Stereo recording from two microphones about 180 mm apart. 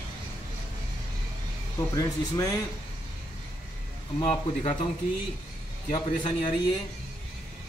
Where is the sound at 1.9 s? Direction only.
20° left (ahead or behind).